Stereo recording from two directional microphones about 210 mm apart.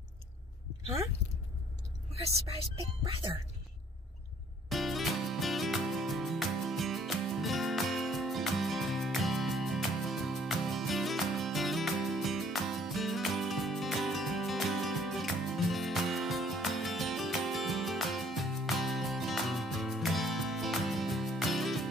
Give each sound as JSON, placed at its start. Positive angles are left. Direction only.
{"t": 2.1, "sound": "speech", "side_deg": -30}
{"t": 4.6, "sound": "music", "side_deg": 0}